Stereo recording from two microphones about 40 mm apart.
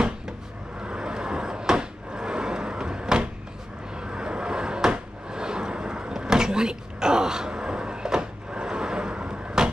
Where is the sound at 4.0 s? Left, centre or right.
Right.